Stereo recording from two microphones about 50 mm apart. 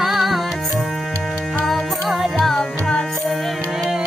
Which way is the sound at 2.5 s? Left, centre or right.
Centre.